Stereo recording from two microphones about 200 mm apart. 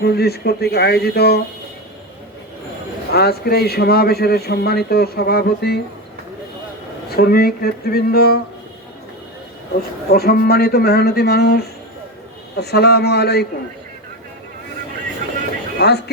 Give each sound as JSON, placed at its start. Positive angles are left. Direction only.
{"t": 0.0, "sound": "a man's voice", "side_deg": 55}
{"t": 3.1, "sound": "a man's voice", "side_deg": 50}
{"t": 7.2, "sound": "a man's voice", "side_deg": 50}
{"t": 10.1, "sound": "a man's voice", "side_deg": 50}
{"t": 15.8, "sound": "speech", "side_deg": 55}